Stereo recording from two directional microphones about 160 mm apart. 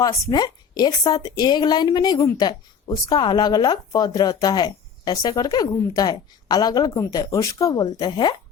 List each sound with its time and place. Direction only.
0.0 s a woman's voice: 25° left (ahead or behind)